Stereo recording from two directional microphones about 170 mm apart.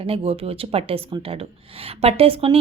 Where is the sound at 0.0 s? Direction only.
35° right (ahead or behind).